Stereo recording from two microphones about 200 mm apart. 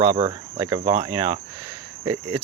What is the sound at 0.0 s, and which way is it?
Speech, 20° right (ahead or behind).